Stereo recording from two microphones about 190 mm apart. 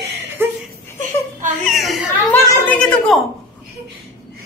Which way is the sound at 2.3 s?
10° left (ahead or behind).